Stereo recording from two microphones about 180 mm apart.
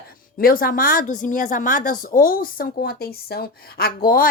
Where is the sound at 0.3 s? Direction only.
55° left (ahead or behind).